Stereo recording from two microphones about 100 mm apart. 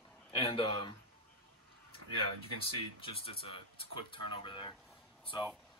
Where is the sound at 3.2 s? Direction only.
60° left (ahead or behind).